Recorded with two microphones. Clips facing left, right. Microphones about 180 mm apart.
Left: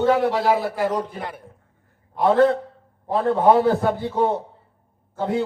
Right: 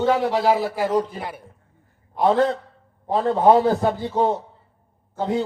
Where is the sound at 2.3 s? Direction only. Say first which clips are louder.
Left 3 dB; 55° left (ahead or behind).